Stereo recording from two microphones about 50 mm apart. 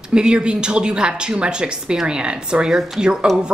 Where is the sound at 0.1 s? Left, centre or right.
Centre.